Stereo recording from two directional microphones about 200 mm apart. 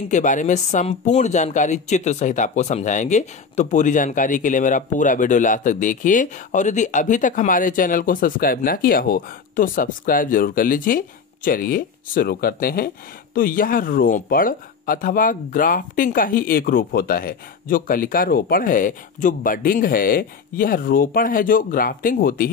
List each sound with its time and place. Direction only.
0.1 s speech: 40° left (ahead or behind)